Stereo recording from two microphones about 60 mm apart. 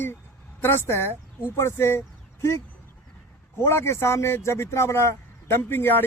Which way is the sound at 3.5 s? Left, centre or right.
Left.